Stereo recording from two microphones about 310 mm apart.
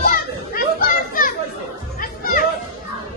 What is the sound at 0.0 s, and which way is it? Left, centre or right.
Children playing, left.